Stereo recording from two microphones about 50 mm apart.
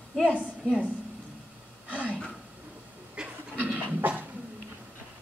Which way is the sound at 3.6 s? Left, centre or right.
Right.